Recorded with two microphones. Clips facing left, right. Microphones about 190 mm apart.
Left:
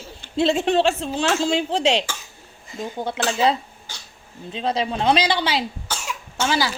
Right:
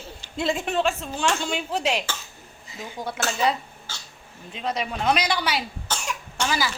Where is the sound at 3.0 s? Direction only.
25° left (ahead or behind).